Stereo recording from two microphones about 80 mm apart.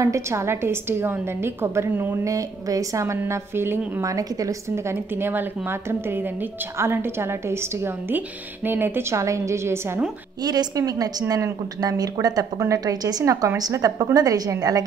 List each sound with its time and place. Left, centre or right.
0.0 s a woman's voice: right
2.2 s a woman's voice: right
4.0 s a woman's voice: right
10.4 s a woman's voice: right